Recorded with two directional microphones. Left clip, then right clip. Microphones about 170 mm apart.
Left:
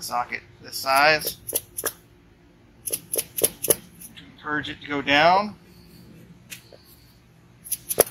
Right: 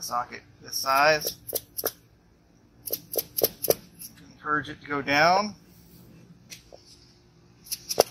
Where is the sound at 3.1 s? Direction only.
Centre (ahead or behind).